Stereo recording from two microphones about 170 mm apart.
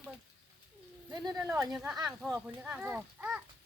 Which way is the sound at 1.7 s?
Centre (ahead or behind).